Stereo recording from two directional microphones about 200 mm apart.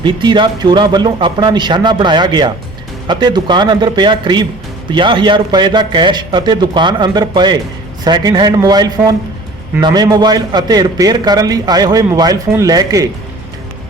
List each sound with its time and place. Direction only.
0.0 s a man's voice: 25° right (ahead or behind)